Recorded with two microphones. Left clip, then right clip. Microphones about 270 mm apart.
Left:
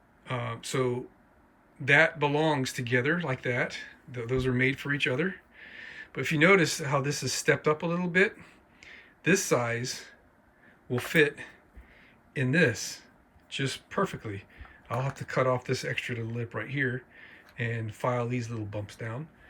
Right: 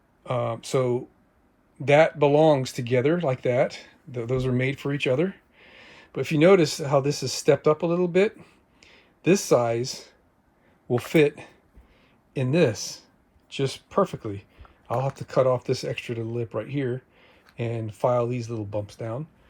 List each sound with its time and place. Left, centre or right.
0.3 s speech: centre